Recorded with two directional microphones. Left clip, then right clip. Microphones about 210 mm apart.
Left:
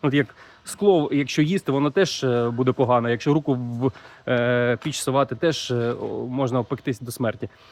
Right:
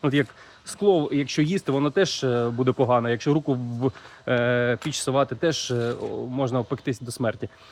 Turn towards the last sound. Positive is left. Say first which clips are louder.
# left 1 dB
turn(degrees=15)  # may be behind; listen again after turning